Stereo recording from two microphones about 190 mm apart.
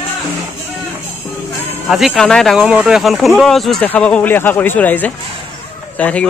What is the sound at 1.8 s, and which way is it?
Speech, centre (ahead or behind).